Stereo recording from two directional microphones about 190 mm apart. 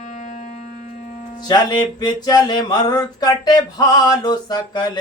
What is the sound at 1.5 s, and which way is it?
Music, 20° left (ahead or behind).